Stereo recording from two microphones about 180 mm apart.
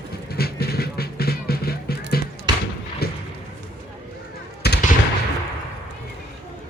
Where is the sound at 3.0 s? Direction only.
60° left (ahead or behind).